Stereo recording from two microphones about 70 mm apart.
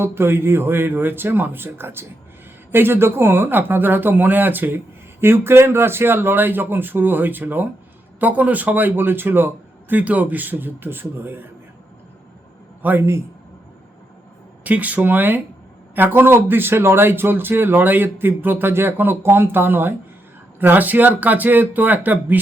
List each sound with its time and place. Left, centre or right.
0.0 s a man's voice: right
12.8 s a man's voice: right
14.6 s a man's voice: right